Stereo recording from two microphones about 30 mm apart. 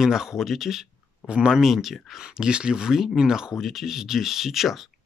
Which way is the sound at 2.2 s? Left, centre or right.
Right.